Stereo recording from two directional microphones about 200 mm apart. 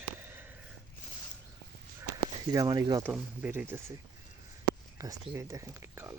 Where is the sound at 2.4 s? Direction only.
20° right (ahead or behind).